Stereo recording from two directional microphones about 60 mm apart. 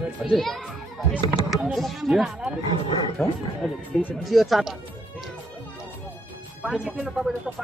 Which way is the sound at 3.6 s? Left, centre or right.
Centre.